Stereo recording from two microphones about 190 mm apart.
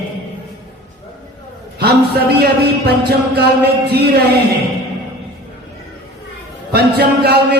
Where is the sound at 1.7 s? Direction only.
60° right (ahead or behind).